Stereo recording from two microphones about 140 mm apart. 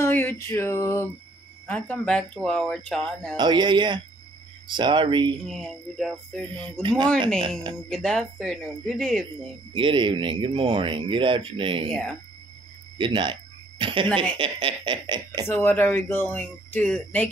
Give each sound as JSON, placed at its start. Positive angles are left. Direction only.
{"t": 0.0, "sound": "a sound", "side_deg": 15}
{"t": 1.7, "sound": "speech", "side_deg": 10}
{"t": 3.3, "sound": "speech", "side_deg": -30}
{"t": 5.5, "sound": "speech", "side_deg": 0}
{"t": 6.8, "sound": "speech", "side_deg": -35}
{"t": 7.9, "sound": "speech", "side_deg": 5}
{"t": 9.8, "sound": "speech", "side_deg": -35}
{"t": 11.9, "sound": "speech", "side_deg": 5}
{"t": 12.9, "sound": "a sound", "side_deg": -35}
{"t": 14.4, "sound": "speech", "side_deg": -40}
{"t": 15.4, "sound": "speech", "side_deg": 15}